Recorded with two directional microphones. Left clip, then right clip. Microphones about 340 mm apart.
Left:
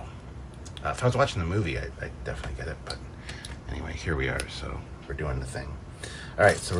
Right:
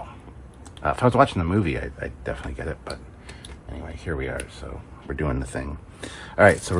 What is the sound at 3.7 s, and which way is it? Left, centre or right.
Speech, centre.